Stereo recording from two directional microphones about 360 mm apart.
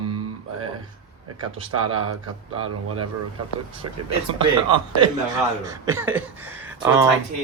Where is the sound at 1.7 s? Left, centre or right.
Right.